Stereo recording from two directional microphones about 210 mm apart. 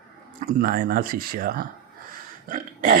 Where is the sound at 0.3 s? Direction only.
40° right (ahead or behind).